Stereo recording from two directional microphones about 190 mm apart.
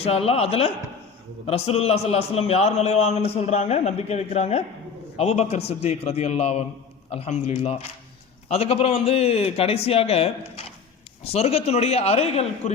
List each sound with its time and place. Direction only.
0.0 s a man's voice: 30° left (ahead or behind)